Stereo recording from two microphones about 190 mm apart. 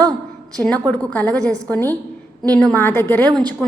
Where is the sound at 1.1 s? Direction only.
5° left (ahead or behind).